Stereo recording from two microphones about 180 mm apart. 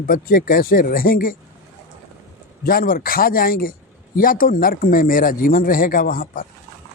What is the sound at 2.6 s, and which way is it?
Speech, 50° left (ahead or behind).